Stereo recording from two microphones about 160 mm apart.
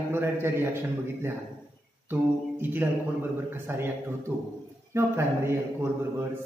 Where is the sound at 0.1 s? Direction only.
15° right (ahead or behind).